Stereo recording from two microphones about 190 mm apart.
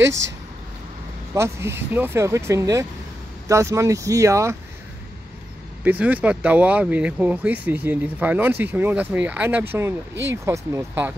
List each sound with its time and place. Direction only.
1.3 s speech: 15° right (ahead or behind)
5.9 s speech: 10° right (ahead or behind)